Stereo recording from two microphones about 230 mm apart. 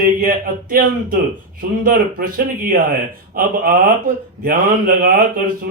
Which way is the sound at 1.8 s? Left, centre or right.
Right.